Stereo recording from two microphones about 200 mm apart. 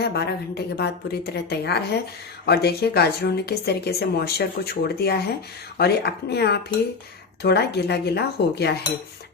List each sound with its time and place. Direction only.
0.0 s speech: 55° left (ahead or behind)